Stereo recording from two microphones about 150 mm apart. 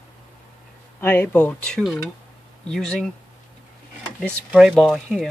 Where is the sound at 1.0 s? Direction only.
15° left (ahead or behind).